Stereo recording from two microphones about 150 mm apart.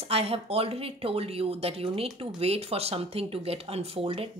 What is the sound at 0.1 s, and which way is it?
Speech, 40° right (ahead or behind).